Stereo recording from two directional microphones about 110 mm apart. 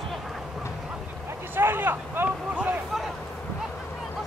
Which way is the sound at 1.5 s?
20° right (ahead or behind).